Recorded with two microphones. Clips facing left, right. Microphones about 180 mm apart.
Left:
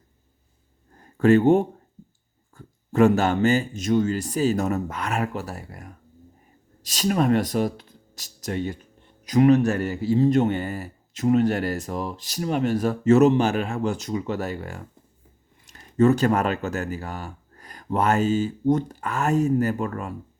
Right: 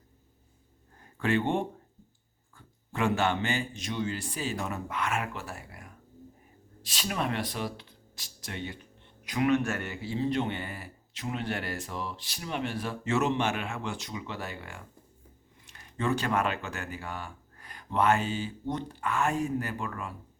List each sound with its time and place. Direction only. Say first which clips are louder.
1.2 s speech: left 11 dB; 40° left (ahead or behind)
16.0 s speech: left 10 dB; 40° left (ahead or behind)